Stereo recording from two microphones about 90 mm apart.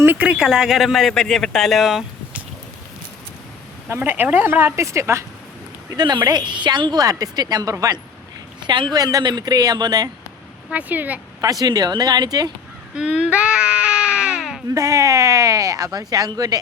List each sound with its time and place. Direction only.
0.0 s speech: 20° right (ahead or behind); by 2.0 s centre (ahead or behind)
3.8 s a woman's voice: 25° right (ahead or behind)
5.9 s speech: 50° right (ahead or behind)
8.6 s speech: 60° right (ahead or behind)
10.7 s speech: 15° right (ahead or behind)
11.6 s speech: 45° right (ahead or behind)
13.0 s speech: 10° right (ahead or behind)
13.3 s baby cry: 10° right (ahead or behind)
14.7 s speech: 35° right (ahead or behind)